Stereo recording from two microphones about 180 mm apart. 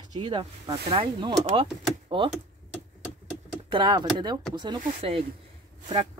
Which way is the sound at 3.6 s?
25° right (ahead or behind).